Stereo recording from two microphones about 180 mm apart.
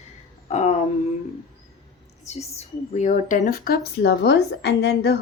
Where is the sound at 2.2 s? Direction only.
35° left (ahead or behind); by 5.1 s 65° left (ahead or behind).